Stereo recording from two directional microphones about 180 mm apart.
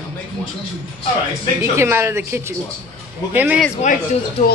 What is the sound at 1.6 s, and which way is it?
A woman's voice, 15° right (ahead or behind).